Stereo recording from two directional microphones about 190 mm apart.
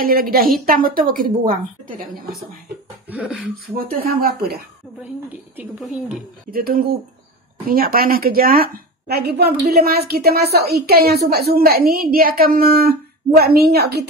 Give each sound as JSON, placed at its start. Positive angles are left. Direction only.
{"t": 0.0, "sound": "a woman's voice", "side_deg": -50}
{"t": 3.1, "sound": "beatboxing", "side_deg": -5}
{"t": 3.7, "sound": "a woman's voice", "side_deg": -50}
{"t": 5.6, "sound": "speech", "side_deg": -5}
{"t": 6.5, "sound": "a woman's voice", "side_deg": -50}